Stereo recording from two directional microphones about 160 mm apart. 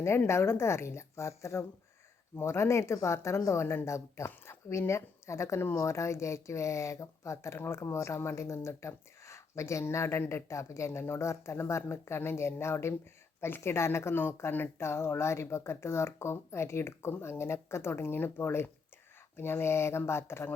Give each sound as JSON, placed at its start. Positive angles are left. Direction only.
{"t": 0.0, "sound": "speech", "side_deg": 15}